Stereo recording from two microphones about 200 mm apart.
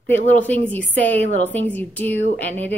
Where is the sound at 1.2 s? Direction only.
35° left (ahead or behind).